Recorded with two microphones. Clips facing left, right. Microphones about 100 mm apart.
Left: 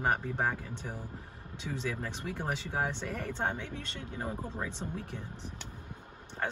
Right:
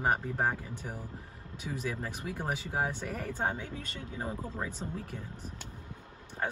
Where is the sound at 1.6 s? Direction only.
5° right (ahead or behind).